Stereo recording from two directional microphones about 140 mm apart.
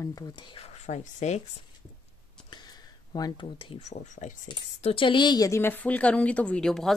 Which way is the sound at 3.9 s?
60° left (ahead or behind).